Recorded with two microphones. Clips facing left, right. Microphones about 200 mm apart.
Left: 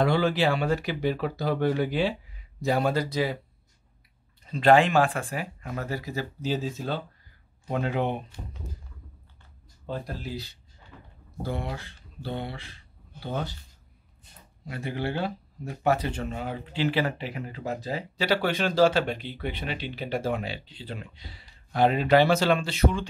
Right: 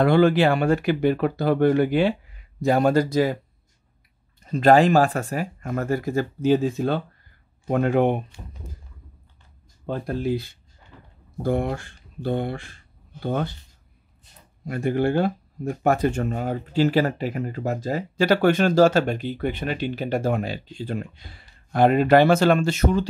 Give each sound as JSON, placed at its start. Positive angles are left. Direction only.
{"t": 0.0, "sound": "speech", "side_deg": -55}
{"t": 4.4, "sound": "speech", "side_deg": -45}
{"t": 9.8, "sound": "speech", "side_deg": -55}
{"t": 14.6, "sound": "speech", "side_deg": -50}